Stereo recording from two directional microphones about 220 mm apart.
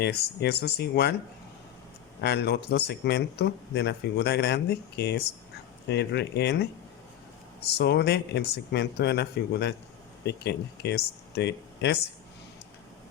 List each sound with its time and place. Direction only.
0.0 s speech: 50° left (ahead or behind)
2.2 s speech: 50° left (ahead or behind)
7.7 s speech: 50° left (ahead or behind)